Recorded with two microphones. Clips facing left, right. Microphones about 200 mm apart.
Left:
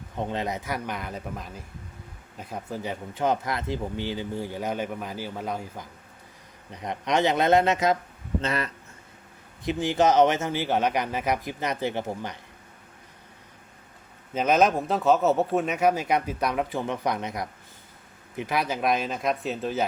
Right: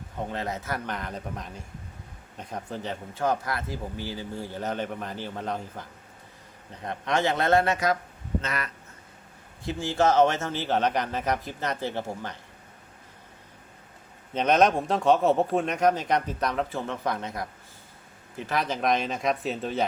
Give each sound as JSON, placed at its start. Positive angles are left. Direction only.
{"t": 0.3, "sound": "a man's voice", "side_deg": 15}
{"t": 9.6, "sound": "speech", "side_deg": 15}
{"t": 14.3, "sound": "speech", "side_deg": 5}